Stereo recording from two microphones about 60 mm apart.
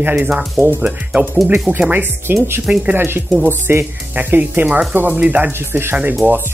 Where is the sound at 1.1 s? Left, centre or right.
Right.